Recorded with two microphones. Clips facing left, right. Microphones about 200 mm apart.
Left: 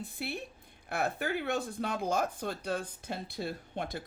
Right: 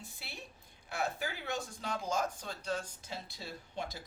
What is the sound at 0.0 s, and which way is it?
Speech, 60° left (ahead or behind).